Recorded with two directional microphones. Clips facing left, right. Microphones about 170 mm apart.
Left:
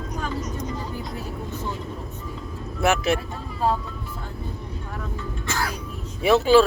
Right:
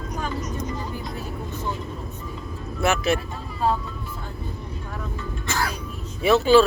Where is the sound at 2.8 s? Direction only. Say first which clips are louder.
Left 1 dB; 15° left (ahead or behind).